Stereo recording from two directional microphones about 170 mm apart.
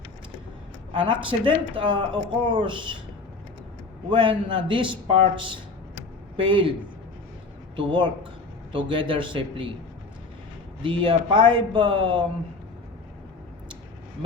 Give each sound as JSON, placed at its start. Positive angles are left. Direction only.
{"t": 1.0, "sound": "a man's voice", "side_deg": -30}
{"t": 4.1, "sound": "a man's voice", "side_deg": -30}
{"t": 7.8, "sound": "a man's voice", "side_deg": -30}
{"t": 10.8, "sound": "a man's voice", "side_deg": -30}